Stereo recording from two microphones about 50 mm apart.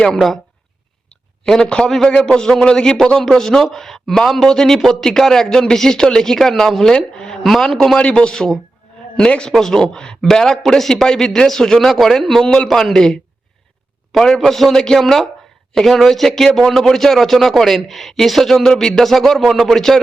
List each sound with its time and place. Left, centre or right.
1.6 s a man's voice: centre
7.9 s a man's voice: left